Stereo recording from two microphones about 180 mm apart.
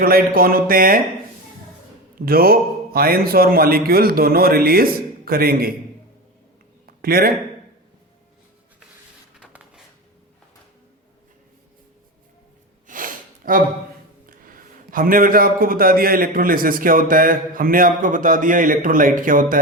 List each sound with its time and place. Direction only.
0.0 s a man's voice: 55° right (ahead or behind)
2.2 s a man's voice: 55° right (ahead or behind)
6.8 s a sound: 55° right (ahead or behind)
9.4 s a sound: 5° right (ahead or behind)
12.9 s gasp: 50° right (ahead or behind)
14.3 s a man's voice: 50° right (ahead or behind)